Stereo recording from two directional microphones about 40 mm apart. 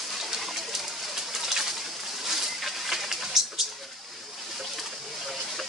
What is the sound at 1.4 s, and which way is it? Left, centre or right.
Pigeon, centre.